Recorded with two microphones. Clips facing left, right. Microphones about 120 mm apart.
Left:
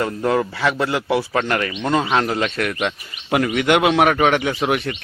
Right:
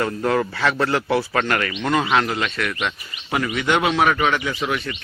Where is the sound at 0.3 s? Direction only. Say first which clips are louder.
Left 2 dB; 15° left (ahead or behind).